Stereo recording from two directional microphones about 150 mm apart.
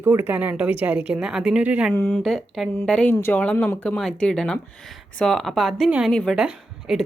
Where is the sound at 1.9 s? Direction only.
10° left (ahead or behind).